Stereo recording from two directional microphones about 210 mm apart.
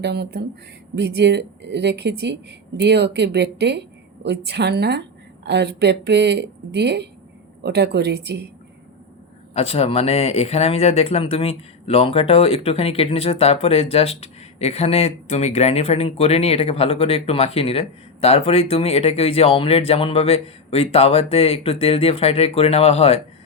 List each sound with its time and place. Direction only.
0.0 s speech: 50° right (ahead or behind)
9.6 s speech: 30° left (ahead or behind)